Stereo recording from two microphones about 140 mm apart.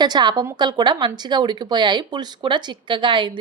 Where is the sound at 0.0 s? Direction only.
30° right (ahead or behind).